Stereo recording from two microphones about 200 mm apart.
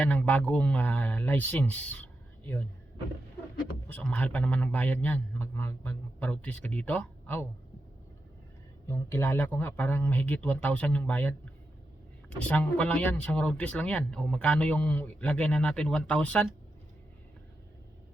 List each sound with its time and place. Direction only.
0.0 s a man's voice: 5° left (ahead or behind)
3.8 s a man's voice: 5° left (ahead or behind)
8.9 s a man's voice: 15° left (ahead or behind)
12.4 s speech: 5° left (ahead or behind)